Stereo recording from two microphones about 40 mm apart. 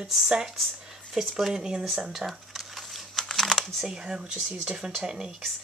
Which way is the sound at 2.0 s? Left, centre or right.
Centre.